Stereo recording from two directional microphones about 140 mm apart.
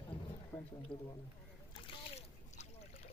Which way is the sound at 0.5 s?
20° left (ahead or behind).